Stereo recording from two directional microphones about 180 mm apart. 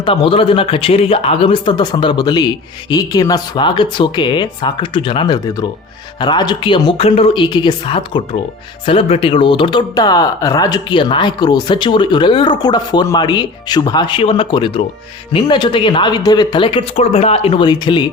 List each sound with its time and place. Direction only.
0.0 s speech: 30° left (ahead or behind)